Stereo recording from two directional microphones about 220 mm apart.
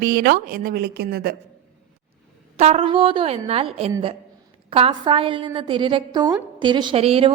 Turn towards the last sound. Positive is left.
turn(degrees=-25)  # may be behind; listen again after turning